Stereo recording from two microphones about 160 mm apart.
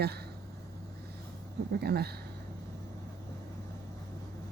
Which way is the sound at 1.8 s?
80° right.